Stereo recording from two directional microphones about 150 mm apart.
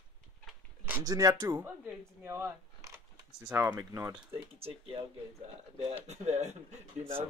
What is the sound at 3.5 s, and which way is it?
Speech, 10° right (ahead or behind).